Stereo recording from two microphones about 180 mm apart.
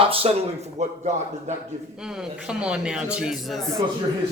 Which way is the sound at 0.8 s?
40° right (ahead or behind).